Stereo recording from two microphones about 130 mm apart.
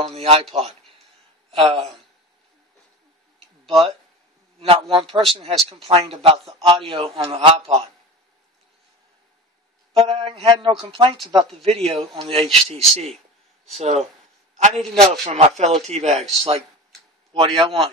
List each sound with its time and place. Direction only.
0.0 s a man's voice: 50° right (ahead or behind)
1.5 s speech: 40° right (ahead or behind)
3.6 s a man's voice: 45° right (ahead or behind)
9.9 s speech: 40° right (ahead or behind); by 14.0 s 55° right (ahead or behind)
15.2 s speech: 55° right (ahead or behind)
17.3 s a man's voice: 40° right (ahead or behind)